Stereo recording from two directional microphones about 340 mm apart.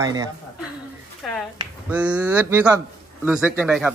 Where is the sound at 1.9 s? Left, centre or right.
Centre.